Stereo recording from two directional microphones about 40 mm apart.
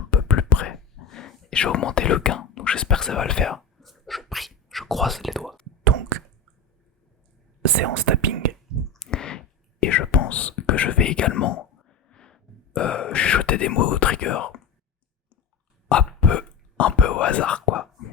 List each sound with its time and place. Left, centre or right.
0.1 s whispering: left
0.7 s dog: centre
1.5 s speech: left
3.5 s a sound: centre
7.6 s whispering: right
8.9 s a sound: centre
10.1 s whispering: left
11.9 s gasp: centre
13.1 s whispering: left
15.9 s hiccup: left
16.7 s whispering: left